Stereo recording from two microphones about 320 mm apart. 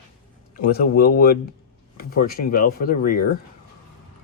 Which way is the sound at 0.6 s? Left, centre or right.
Left.